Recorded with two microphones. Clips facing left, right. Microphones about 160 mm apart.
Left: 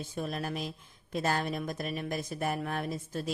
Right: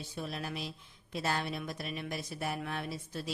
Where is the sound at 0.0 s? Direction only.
50° left (ahead or behind).